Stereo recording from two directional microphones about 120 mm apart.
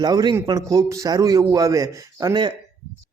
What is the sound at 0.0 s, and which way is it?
Speech, 35° right (ahead or behind).